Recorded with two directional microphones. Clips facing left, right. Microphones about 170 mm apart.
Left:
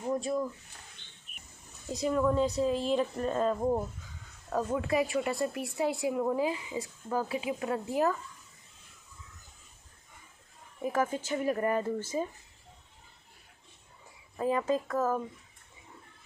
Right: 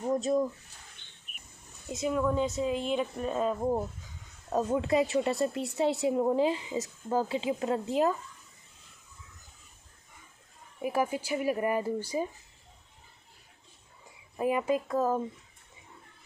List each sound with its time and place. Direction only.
0.0 s speech: 20° right (ahead or behind)
1.9 s speech: 5° right (ahead or behind)
4.5 s speech: 20° right (ahead or behind)
10.8 s speech: 10° right (ahead or behind)
14.3 s speech: 15° right (ahead or behind)